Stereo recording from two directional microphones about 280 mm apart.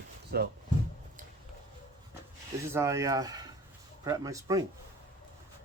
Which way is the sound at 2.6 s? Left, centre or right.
Centre.